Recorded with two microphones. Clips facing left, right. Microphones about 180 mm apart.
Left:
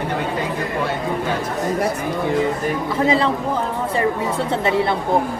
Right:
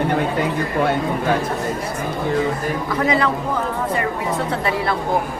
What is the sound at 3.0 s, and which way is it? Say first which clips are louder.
Speech: left 2 dB; 30° left (ahead or behind).